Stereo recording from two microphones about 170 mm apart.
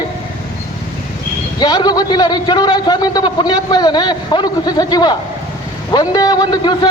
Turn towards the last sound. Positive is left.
turn(degrees=25)  # may be behind; listen again after turning